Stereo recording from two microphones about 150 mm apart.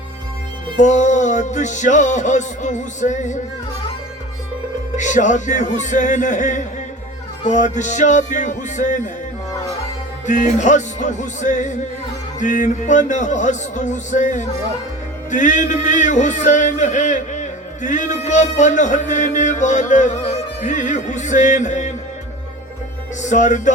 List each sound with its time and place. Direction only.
0.8 s music: 55° left (ahead or behind)
4.9 s speech: 55° left (ahead or behind)
10.2 s speech: 55° left (ahead or behind)
15.3 s a sound: 55° left (ahead or behind)
23.2 s speech: 55° left (ahead or behind)